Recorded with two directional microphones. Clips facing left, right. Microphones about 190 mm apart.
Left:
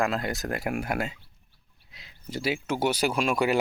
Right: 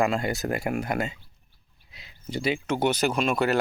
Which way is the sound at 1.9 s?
Centre (ahead or behind).